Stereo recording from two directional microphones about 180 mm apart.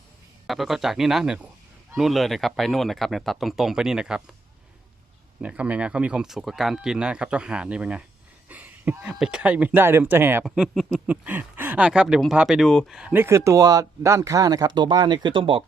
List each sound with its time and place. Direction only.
0.4 s speech: centre (ahead or behind)
5.4 s speech: 5° right (ahead or behind)
10.4 s speech: centre (ahead or behind); by 15.6 s 25° right (ahead or behind)